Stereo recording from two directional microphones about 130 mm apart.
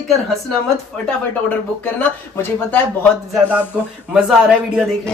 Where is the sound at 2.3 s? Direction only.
15° left (ahead or behind).